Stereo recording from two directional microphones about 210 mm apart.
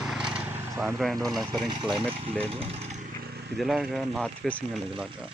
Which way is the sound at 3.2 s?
50° right (ahead or behind).